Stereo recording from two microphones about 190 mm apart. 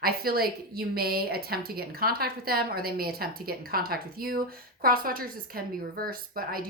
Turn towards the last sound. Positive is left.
turn(degrees=-50)  # may be behind; listen again after turning